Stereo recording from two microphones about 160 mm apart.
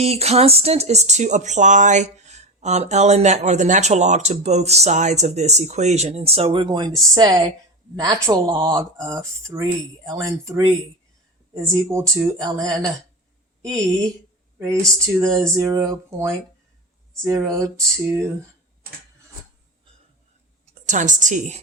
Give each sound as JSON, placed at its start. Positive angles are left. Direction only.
{"t": 0.0, "sound": "speech", "side_deg": -40}
{"t": 15.0, "sound": "speech", "side_deg": -20}
{"t": 20.8, "sound": "speech", "side_deg": -50}